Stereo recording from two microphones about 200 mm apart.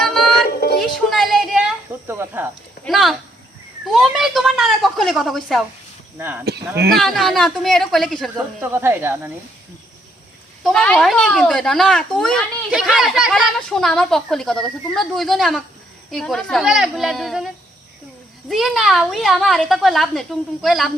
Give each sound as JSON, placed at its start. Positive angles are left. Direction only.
{"t": 0.0, "sound": "music", "side_deg": 0}
{"t": 0.5, "sound": "music", "side_deg": 50}
{"t": 1.1, "sound": "a sound", "side_deg": 0}
{"t": 2.0, "sound": "speech", "side_deg": -10}
{"t": 2.8, "sound": "a child's voice", "side_deg": 0}
{"t": 6.1, "sound": "speech", "side_deg": -10}
{"t": 6.4, "sound": "speech", "side_deg": -55}
{"t": 6.9, "sound": "a child's voice", "side_deg": 0}
{"t": 8.6, "sound": "speech", "side_deg": -10}
{"t": 10.6, "sound": "a child's voice", "side_deg": 0}